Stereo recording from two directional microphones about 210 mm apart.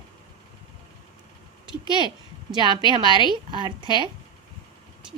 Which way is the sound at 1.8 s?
20° right (ahead or behind).